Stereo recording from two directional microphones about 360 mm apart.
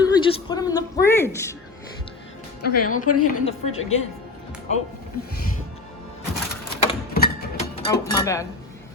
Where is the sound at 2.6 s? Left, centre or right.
Left.